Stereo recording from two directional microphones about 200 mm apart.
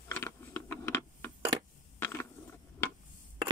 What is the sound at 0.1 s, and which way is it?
Mechanisms, 10° left (ahead or behind).